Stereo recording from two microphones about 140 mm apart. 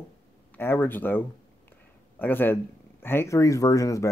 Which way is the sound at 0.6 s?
15° left (ahead or behind).